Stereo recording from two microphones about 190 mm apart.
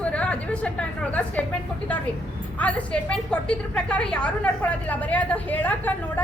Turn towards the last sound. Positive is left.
turn(degrees=10)  # may be behind; listen again after turning